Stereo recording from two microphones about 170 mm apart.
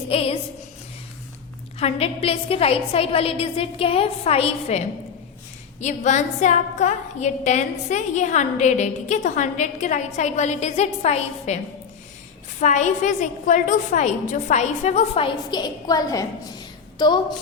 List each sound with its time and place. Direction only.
0.1 s a woman's voice: 35° left (ahead or behind)
1.8 s a woman's voice: 35° left (ahead or behind)
5.8 s a woman's voice: 45° left (ahead or behind); by 16.2 s 20° left (ahead or behind)